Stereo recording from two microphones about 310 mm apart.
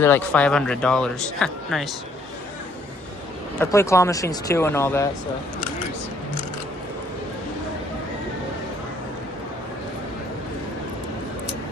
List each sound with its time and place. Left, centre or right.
0.0 s speech: centre
3.6 s speech: centre